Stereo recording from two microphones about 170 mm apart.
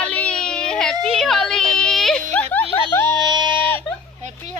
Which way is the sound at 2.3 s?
10° left (ahead or behind).